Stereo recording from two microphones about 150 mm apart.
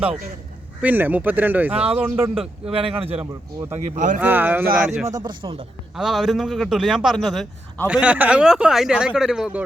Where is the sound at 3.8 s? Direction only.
55° right (ahead or behind).